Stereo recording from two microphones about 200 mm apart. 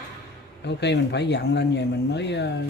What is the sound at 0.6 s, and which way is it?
Speech, 60° left (ahead or behind).